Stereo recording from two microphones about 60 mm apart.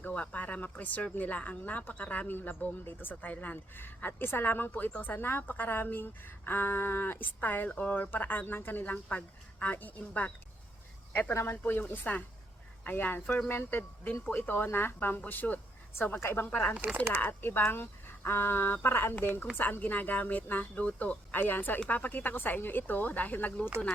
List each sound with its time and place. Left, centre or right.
0.0 s speech: left
11.1 s a woman's voice: left